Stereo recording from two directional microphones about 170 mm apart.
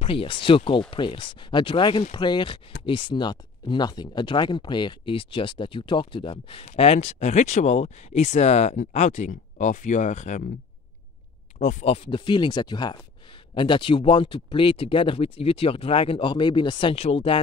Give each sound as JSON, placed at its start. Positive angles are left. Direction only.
{"t": 0.0, "sound": "speech", "side_deg": 30}
{"t": 11.5, "sound": "speech", "side_deg": 45}